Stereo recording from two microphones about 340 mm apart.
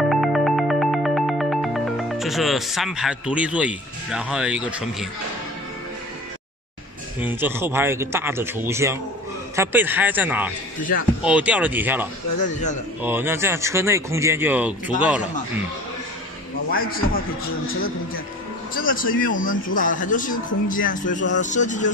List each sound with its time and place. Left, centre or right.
0.1 s music: centre
7.2 s speech: centre
16.7 s speech: left
18.8 s speech: left